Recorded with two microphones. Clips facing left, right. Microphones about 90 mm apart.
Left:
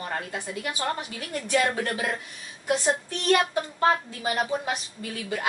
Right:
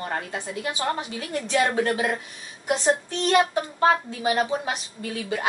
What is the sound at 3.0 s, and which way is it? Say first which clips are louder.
A woman's voice: right 2 dB; 20° right (ahead or behind).